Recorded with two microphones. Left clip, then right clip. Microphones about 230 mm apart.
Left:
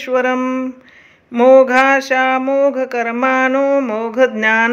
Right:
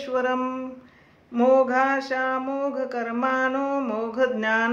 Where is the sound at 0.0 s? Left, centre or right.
Left.